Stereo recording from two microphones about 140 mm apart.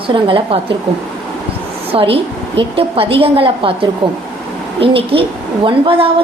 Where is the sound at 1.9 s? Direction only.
40° right (ahead or behind).